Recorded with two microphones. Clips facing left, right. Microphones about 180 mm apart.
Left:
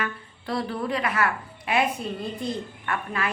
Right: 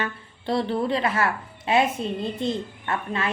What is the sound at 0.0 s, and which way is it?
A woman's voice, 25° right (ahead or behind).